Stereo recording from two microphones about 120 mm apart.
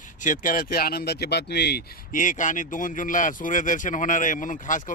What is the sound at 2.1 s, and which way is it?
Speech, 90° left.